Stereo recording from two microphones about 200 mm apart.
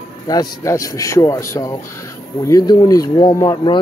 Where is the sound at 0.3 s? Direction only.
20° left (ahead or behind).